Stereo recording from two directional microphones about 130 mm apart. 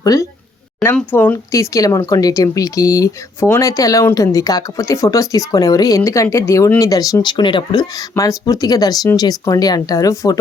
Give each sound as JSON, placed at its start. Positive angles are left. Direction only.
{"t": 0.0, "sound": "speech", "side_deg": 25}
{"t": 1.1, "sound": "speech", "side_deg": 15}